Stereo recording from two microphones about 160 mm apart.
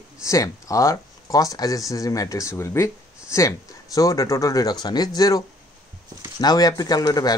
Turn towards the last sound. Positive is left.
turn(degrees=25)  # may be behind; listen again after turning